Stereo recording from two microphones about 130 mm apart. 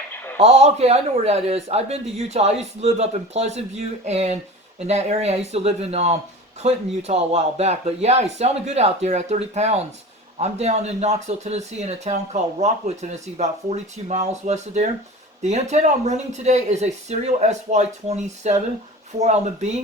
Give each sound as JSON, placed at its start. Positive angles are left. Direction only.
{"t": 0.3, "sound": "speech", "side_deg": -55}